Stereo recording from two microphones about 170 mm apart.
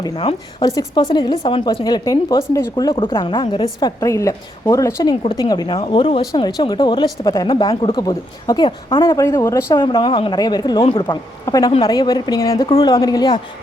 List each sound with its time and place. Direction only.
0.0 s speech: 25° left (ahead or behind)
9.8 s speech: 25° left (ahead or behind)